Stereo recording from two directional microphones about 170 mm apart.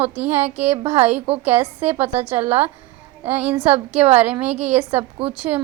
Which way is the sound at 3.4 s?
10° right (ahead or behind).